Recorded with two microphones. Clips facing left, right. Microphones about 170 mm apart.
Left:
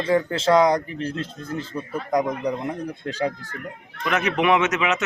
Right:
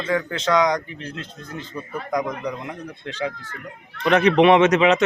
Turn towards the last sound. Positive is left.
turn(degrees=-35)  # may be behind; listen again after turning